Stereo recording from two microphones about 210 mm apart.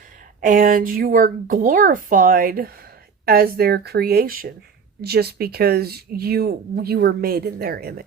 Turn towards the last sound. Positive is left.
turn(degrees=-45)  # may be behind; listen again after turning